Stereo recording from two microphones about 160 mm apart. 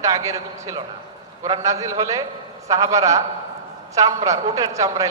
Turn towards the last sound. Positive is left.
turn(degrees=-20)  # may be behind; listen again after turning